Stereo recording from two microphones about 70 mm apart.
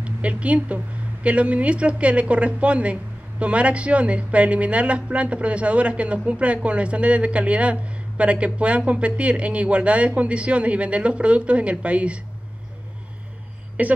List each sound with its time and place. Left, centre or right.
0.0 s a woman's voice: centre
13.8 s speech: right